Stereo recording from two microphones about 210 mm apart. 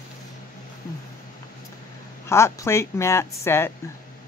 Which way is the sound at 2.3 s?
15° left (ahead or behind).